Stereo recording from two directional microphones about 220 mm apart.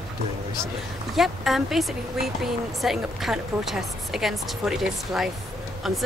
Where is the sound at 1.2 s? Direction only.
Centre (ahead or behind).